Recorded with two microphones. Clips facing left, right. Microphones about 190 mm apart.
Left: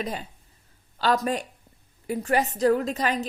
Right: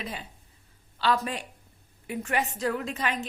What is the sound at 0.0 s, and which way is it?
A woman's voice, 40° left (ahead or behind).